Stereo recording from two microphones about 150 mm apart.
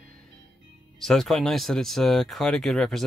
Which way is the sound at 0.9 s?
Centre (ahead or behind).